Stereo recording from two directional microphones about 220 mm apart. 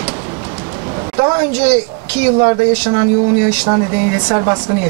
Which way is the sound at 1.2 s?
20° right (ahead or behind).